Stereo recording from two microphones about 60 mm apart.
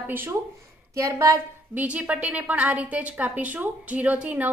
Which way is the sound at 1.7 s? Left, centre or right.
Right.